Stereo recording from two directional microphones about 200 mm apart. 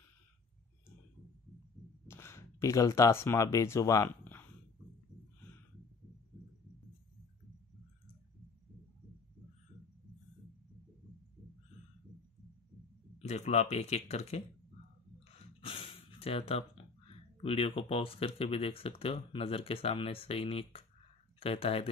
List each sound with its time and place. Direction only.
2.0 s speech: 15° left (ahead or behind)
13.2 s speech: 35° left (ahead or behind)
15.3 s a sound: 30° left (ahead or behind)
17.4 s speech: 30° left (ahead or behind)